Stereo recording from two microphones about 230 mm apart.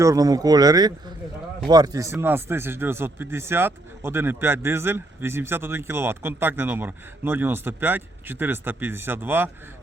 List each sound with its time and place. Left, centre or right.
0.0 s speech: centre